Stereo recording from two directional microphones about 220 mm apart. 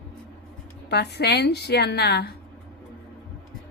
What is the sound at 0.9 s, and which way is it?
A woman's voice, 50° left (ahead or behind).